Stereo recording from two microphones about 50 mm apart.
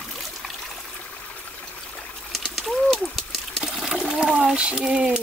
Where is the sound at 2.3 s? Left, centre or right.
Centre.